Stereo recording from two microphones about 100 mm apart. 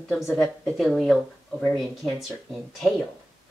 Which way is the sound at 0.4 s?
5° left (ahead or behind).